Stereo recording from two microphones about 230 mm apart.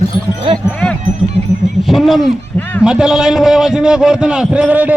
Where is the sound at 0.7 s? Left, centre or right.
Centre.